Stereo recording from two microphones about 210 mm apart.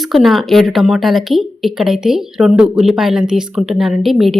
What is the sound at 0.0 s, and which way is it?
Speech, centre (ahead or behind).